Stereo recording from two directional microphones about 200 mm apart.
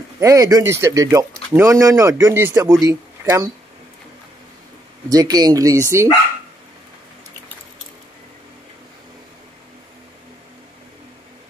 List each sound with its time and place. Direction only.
0.2 s speech: 15° right (ahead or behind)
5.1 s speech: 20° right (ahead or behind)